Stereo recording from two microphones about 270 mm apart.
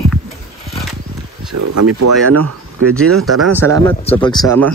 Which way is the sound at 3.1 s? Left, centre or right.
Centre.